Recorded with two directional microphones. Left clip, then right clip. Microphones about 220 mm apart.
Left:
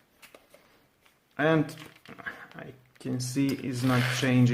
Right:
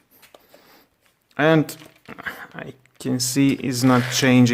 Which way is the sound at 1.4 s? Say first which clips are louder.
Right 8 dB; 45° right (ahead or behind).